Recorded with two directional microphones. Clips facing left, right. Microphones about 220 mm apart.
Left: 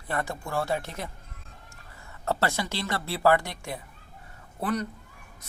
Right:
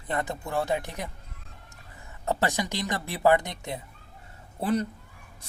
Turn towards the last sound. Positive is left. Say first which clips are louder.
# right 3 dB
turn(degrees=-30)  # may be behind; listen again after turning